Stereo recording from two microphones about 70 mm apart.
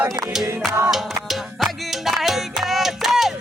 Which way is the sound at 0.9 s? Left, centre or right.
Centre.